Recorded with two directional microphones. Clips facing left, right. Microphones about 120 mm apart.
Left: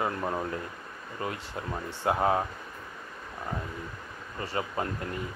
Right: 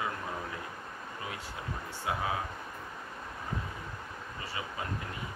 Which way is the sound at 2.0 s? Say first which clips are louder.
Left 8 dB; 50° left (ahead or behind).